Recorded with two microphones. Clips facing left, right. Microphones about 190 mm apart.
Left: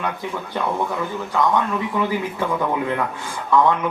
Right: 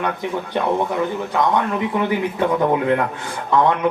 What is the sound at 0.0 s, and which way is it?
Speech, 20° right (ahead or behind).